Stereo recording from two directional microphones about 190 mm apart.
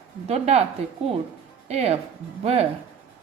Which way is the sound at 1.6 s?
35° right (ahead or behind).